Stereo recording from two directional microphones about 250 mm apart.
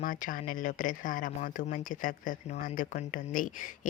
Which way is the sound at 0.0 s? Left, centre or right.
Left.